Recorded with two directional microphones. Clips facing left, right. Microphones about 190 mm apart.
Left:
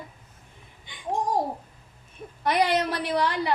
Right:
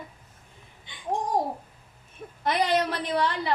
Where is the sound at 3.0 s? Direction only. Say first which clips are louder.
Left 1 dB; 15° left (ahead or behind).